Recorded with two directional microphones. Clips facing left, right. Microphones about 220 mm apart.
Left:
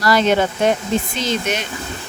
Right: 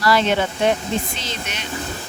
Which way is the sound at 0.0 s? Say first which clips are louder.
Left 2 dB; 45° left (ahead or behind).